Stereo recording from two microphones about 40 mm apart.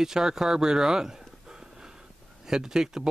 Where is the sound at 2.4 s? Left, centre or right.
Centre.